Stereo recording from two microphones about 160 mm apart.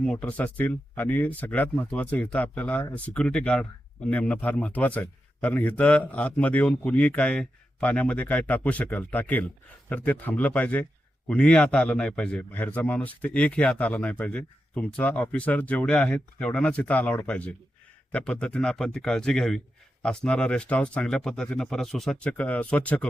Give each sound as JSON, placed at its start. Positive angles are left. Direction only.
{"t": 0.0, "sound": "a man's voice", "side_deg": 5}